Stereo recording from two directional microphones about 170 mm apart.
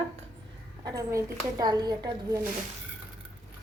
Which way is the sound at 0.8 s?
20° right (ahead or behind).